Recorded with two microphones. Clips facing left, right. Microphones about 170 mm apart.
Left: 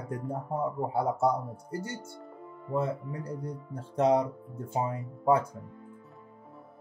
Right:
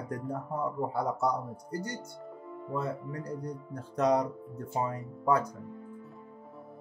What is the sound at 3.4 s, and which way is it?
Speech, 25° left (ahead or behind).